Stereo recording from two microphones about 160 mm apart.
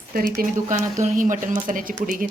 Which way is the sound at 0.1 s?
65° right (ahead or behind).